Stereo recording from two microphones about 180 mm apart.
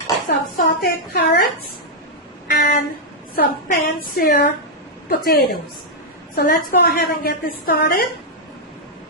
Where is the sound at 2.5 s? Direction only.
55° left (ahead or behind).